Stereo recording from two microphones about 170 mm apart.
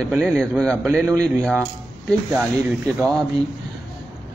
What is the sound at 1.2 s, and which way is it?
Speech, 5° left (ahead or behind).